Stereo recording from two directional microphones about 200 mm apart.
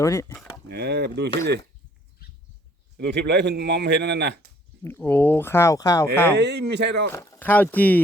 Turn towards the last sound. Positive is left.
turn(degrees=10)  # may be behind; listen again after turning